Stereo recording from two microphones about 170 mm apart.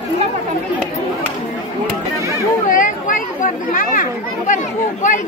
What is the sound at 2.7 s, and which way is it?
Speech, 50° left (ahead or behind).